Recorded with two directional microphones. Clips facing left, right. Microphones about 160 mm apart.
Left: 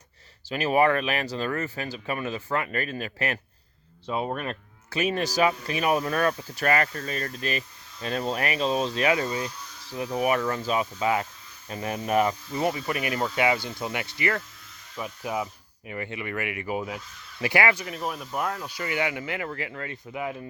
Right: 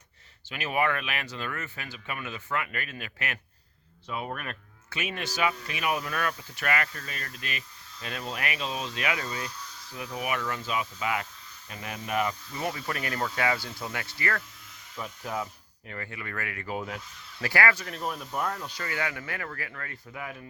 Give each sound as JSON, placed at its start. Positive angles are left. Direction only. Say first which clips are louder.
{"t": 0.4, "sound": "speech", "louder": "left 7 dB", "side_deg": 35}
{"t": 12.6, "sound": "speech", "louder": "left 5 dB", "side_deg": 15}
{"t": 17.4, "sound": "speech", "louder": "left 3 dB", "side_deg": 20}
{"t": 17.8, "sound": "speech", "louder": "left 2 dB", "side_deg": 5}